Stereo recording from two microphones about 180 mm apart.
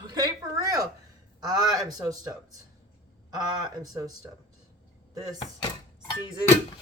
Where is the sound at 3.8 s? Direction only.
20° right (ahead or behind).